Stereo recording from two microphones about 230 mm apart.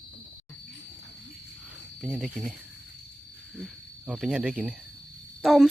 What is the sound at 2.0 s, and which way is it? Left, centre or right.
Speech, centre.